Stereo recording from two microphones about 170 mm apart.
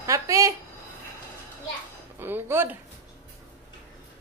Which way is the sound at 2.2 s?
15° right (ahead or behind).